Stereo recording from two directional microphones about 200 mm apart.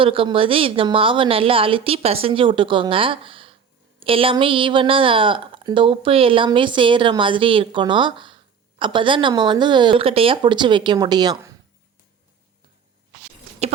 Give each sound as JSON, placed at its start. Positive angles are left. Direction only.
{"t": 0.0, "sound": "a woman's voice", "side_deg": -25}